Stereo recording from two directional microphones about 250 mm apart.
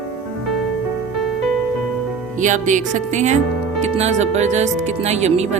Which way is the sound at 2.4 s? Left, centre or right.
Right.